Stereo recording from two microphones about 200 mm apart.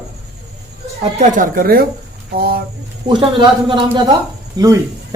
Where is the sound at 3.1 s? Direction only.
25° right (ahead or behind).